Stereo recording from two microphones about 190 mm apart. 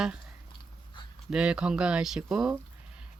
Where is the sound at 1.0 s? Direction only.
25° left (ahead or behind).